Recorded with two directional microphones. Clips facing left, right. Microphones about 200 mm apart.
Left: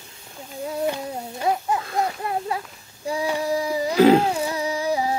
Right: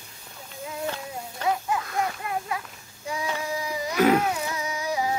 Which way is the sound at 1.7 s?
30° left (ahead or behind).